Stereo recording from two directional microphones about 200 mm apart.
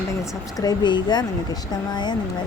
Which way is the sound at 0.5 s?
20° left (ahead or behind).